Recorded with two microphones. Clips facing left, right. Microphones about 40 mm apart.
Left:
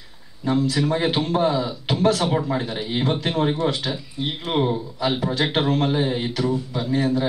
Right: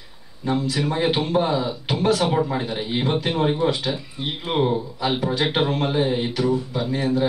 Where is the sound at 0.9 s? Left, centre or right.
Centre.